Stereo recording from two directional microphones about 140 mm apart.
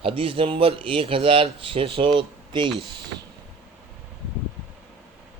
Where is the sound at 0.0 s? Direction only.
40° right (ahead or behind).